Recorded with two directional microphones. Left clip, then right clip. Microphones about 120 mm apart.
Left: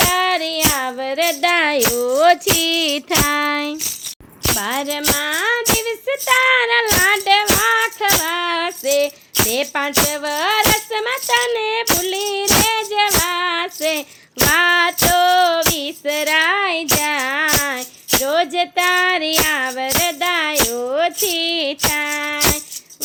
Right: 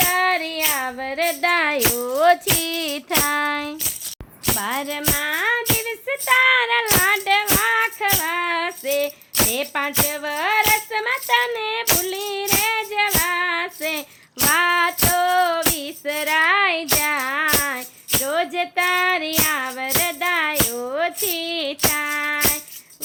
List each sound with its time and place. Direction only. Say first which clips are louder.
0.1 s music: left 2 dB; 50° left (ahead or behind)
14.5 s female singing: left 3 dB; 35° left (ahead or behind)
18.2 s child singing: left 4 dB; 45° left (ahead or behind)